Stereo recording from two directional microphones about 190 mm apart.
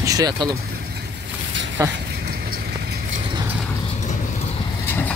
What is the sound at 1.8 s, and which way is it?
Speech, 15° right (ahead or behind).